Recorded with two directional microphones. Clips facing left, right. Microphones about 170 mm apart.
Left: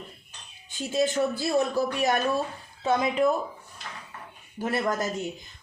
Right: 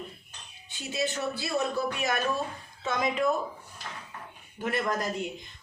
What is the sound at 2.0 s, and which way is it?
A woman's voice, 35° left (ahead or behind).